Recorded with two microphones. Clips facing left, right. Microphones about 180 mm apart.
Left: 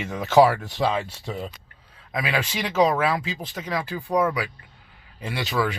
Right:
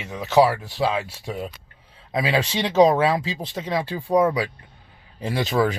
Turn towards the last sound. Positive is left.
turn(degrees=-45)  # may be behind; listen again after turning